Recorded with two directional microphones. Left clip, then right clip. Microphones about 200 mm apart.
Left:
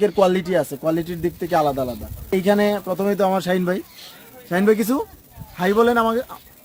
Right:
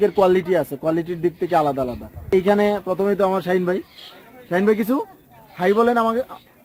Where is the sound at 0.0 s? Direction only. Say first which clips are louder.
Right 1 dB; 10° left (ahead or behind).